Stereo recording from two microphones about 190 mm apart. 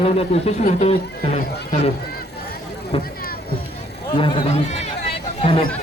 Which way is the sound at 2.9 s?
30° left (ahead or behind).